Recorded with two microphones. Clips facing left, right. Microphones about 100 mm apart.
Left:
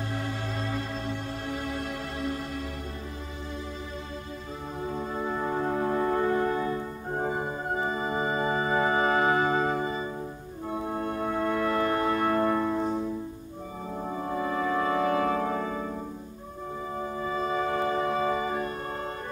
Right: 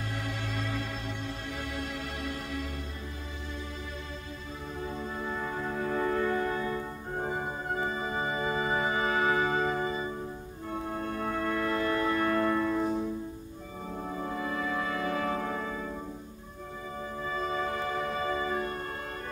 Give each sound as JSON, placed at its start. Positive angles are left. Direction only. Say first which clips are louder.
{"t": 5.1, "sound": "music", "louder": "left 7 dB", "side_deg": 35}
{"t": 5.9, "sound": "music", "louder": "left 1 dB", "side_deg": 30}
{"t": 11.1, "sound": "music", "louder": "left 3 dB", "side_deg": 30}
{"t": 11.6, "sound": "music", "louder": "left 3 dB", "side_deg": 50}
{"t": 12.0, "sound": "music", "louder": "left 2 dB", "side_deg": 35}
{"t": 14.0, "sound": "music", "louder": "left 4 dB", "side_deg": 30}
{"t": 17.3, "sound": "music", "louder": "left 3 dB", "side_deg": 30}